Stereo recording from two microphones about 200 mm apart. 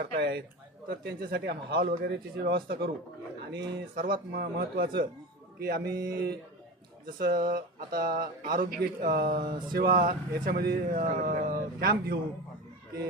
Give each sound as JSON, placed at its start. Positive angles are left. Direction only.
{"t": 0.0, "sound": "speech", "side_deg": -55}
{"t": 9.4, "sound": "mantra", "side_deg": -25}
{"t": 9.7, "sound": "speech", "side_deg": -50}